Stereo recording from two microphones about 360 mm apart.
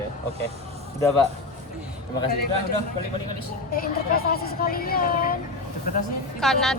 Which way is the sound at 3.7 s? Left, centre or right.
Left.